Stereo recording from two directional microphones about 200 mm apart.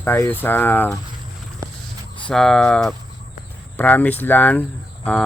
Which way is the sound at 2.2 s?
5° left (ahead or behind).